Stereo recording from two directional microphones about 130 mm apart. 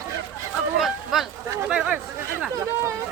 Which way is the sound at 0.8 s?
Centre (ahead or behind).